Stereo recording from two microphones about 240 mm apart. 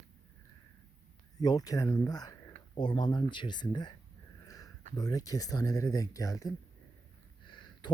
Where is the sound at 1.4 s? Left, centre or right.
Centre.